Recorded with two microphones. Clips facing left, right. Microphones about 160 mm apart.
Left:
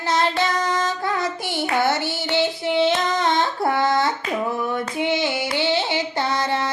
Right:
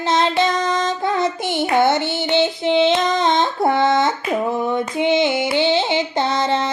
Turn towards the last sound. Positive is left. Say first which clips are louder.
# right 4 dB
turn(degrees=-20)  # may be behind; listen again after turning